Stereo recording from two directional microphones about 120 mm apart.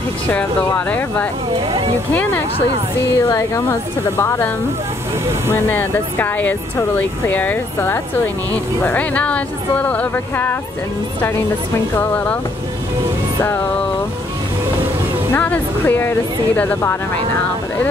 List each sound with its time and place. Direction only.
0.3 s speech: 15° left (ahead or behind)
3.2 s speech: 30° left (ahead or behind)
5.5 s speech: 15° left (ahead or behind)
11.9 s speech: 20° left (ahead or behind)
15.3 s speech: 15° left (ahead or behind)